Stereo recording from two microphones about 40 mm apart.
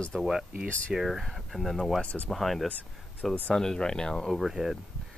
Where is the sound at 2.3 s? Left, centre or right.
Centre.